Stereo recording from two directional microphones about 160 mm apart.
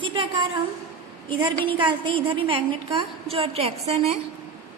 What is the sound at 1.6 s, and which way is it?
A woman's voice, 30° right (ahead or behind).